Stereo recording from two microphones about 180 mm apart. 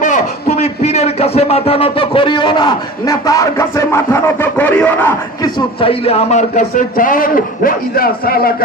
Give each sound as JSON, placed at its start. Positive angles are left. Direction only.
{"t": 0.0, "sound": "speech", "side_deg": 40}
{"t": 5.4, "sound": "speech", "side_deg": 30}